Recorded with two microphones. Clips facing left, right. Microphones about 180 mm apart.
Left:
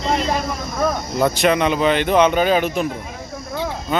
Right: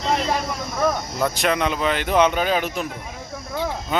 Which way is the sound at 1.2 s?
Centre (ahead or behind).